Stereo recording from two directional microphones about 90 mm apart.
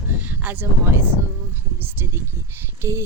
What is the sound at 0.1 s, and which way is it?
Speech, 20° right (ahead or behind).